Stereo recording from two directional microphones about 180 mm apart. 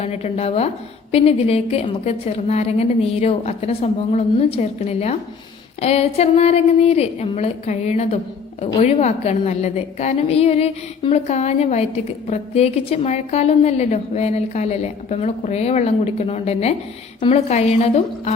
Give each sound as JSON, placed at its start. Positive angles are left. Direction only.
{"t": 0.0, "sound": "a woman's voice", "side_deg": 35}